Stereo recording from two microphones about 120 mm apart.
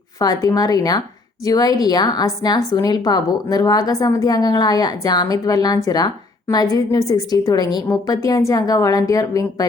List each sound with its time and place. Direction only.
0.2 s a woman's voice: 30° left (ahead or behind)